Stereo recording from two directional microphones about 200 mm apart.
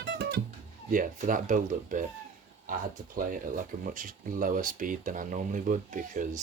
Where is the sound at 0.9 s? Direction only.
40° right (ahead or behind).